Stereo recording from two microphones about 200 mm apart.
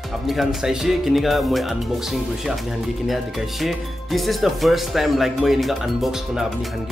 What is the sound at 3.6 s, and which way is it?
Speech, centre (ahead or behind).